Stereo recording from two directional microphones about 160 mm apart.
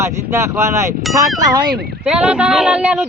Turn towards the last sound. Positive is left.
turn(degrees=-5)  # may be behind; listen again after turning